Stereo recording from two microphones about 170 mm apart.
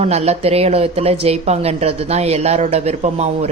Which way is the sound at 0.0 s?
40° right (ahead or behind).